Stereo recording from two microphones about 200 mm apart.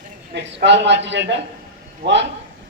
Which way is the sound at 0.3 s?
60° right (ahead or behind).